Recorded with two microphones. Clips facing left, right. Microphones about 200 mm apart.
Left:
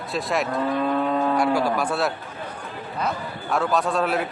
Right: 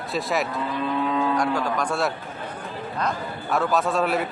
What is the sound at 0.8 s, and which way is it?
Livestock, 45° left (ahead or behind).